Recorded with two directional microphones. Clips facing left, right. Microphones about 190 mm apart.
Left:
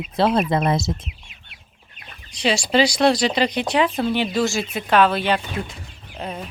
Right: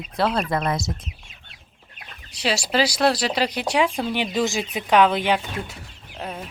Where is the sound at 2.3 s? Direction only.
5° right (ahead or behind).